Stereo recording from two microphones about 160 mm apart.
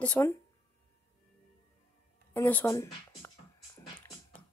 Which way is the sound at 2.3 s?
15° left (ahead or behind).